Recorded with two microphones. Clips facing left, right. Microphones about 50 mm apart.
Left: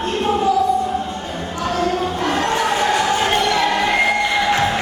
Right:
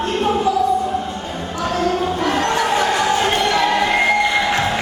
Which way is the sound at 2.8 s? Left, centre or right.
Centre.